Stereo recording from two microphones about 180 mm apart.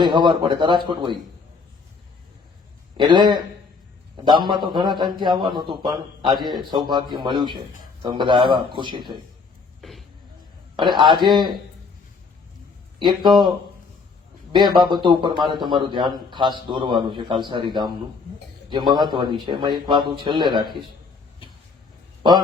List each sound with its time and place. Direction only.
0.0 s a man's voice: 25° right (ahead or behind)
3.0 s a man's voice: 25° right (ahead or behind)
9.8 s a sound: centre (ahead or behind)
10.8 s a man's voice: 25° right (ahead or behind)
14.5 s a man's voice: 25° right (ahead or behind)